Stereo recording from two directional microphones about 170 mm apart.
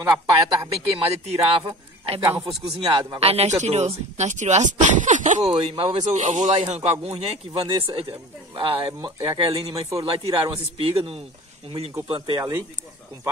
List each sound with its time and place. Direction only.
0.0 s speech: 20° right (ahead or behind)
0.9 s speech: 40° right (ahead or behind)
2.2 s speech: 15° right (ahead or behind)
2.8 s speech: 30° right (ahead or behind)
5.5 s speech: 30° right (ahead or behind)
6.0 s speech: 45° right (ahead or behind); by 10.0 s 20° right (ahead or behind)
10.0 s speech: 35° right (ahead or behind)